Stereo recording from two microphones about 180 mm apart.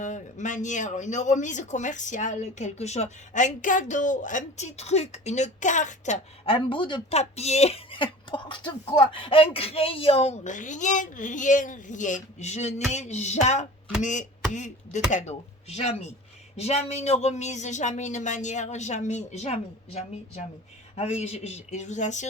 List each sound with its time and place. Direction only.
0.0 s speech: 40° left (ahead or behind)